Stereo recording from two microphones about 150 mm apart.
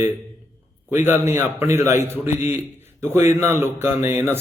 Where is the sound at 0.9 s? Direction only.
15° right (ahead or behind).